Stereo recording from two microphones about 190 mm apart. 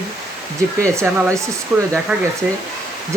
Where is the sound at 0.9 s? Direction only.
15° right (ahead or behind).